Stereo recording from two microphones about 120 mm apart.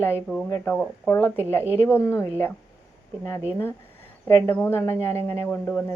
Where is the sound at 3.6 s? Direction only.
20° left (ahead or behind).